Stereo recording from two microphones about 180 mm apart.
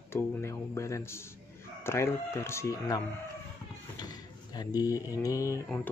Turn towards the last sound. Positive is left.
turn(degrees=5)  # may be behind; listen again after turning